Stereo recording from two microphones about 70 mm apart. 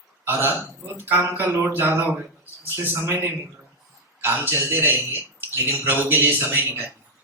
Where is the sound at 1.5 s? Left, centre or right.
Right.